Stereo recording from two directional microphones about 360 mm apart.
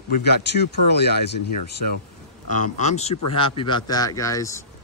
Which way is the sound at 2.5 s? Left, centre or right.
Centre.